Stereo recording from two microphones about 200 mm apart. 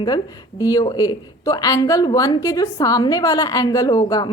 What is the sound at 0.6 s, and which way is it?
A woman's voice, 20° left (ahead or behind).